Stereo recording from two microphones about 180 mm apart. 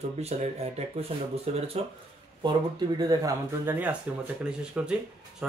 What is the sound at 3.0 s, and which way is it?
Speech, 20° right (ahead or behind).